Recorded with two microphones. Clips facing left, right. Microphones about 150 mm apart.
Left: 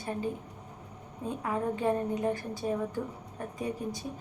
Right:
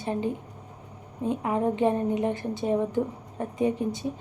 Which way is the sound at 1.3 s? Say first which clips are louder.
Right 6 dB; 20° right (ahead or behind).